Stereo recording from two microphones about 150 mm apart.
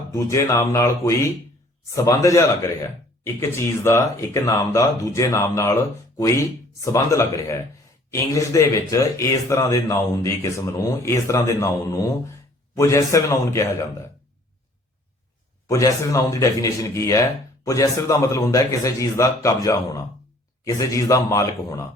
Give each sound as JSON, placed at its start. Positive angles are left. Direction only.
{"t": 0.1, "sound": "speech", "side_deg": 20}
{"t": 12.7, "sound": "speech", "side_deg": 20}
{"t": 15.6, "sound": "speech", "side_deg": 20}